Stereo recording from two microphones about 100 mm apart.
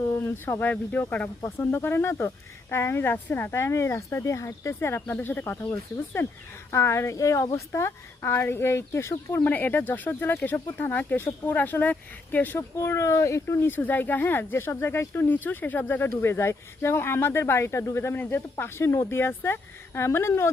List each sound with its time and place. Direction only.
0.3 s speech: 25° left (ahead or behind)